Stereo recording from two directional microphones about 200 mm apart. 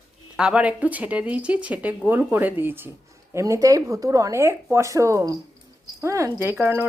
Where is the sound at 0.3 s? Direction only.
5° right (ahead or behind).